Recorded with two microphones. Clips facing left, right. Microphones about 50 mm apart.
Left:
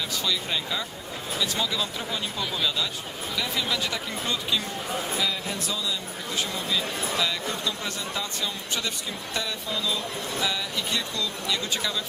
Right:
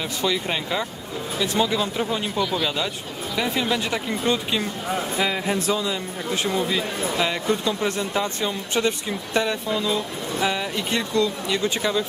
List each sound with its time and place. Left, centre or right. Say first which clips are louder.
0.2 s speech: right 6 dB; right
5.1 s speech: right 6 dB; right